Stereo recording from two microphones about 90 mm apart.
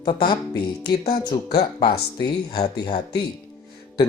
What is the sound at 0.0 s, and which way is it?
Music, 60° left (ahead or behind).